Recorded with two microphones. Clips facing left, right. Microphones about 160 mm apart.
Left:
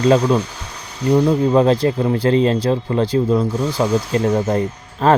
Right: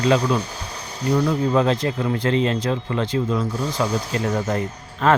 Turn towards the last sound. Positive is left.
turn(degrees=30)  # may be behind; listen again after turning